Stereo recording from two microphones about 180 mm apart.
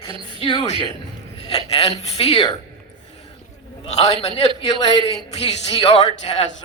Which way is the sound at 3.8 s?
35° left (ahead or behind).